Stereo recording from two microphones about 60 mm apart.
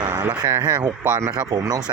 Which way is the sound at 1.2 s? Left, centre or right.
Right.